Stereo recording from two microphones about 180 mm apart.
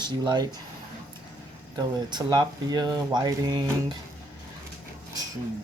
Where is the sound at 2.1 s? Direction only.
25° right (ahead or behind).